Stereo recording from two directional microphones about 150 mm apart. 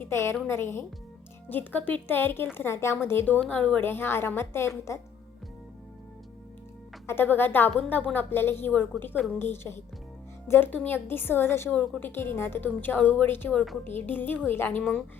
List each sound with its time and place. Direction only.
0.0 s a woman's voice: 15° left (ahead or behind)
7.1 s a woman's voice: 15° left (ahead or behind)